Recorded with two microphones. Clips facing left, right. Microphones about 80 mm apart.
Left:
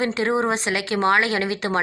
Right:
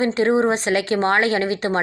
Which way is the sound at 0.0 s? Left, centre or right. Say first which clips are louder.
Right 4 dB; right.